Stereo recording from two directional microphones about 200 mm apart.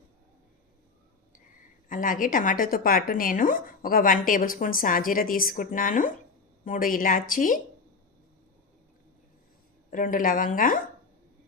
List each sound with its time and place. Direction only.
1.9 s a woman's voice: 40° left (ahead or behind)
9.9 s a woman's voice: 40° left (ahead or behind)